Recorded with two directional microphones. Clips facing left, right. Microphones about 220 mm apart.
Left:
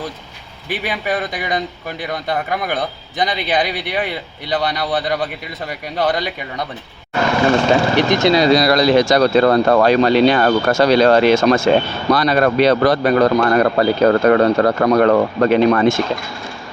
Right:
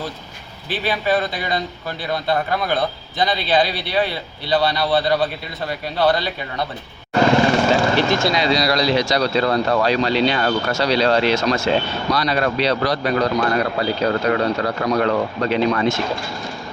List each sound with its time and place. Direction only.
0.7 s a man's voice: 15° left (ahead or behind)
7.9 s a man's voice: 15° left (ahead or behind)
8.4 s speech: 50° left (ahead or behind)